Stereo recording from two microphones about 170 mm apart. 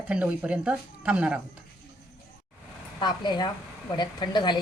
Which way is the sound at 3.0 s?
25° left (ahead or behind).